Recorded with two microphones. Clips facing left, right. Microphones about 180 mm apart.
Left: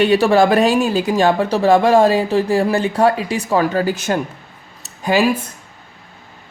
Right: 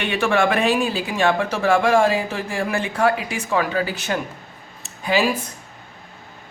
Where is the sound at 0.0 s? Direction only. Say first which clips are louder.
Left 7 dB; 35° left (ahead or behind).